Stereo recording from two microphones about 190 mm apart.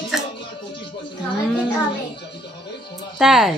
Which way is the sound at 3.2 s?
Centre (ahead or behind).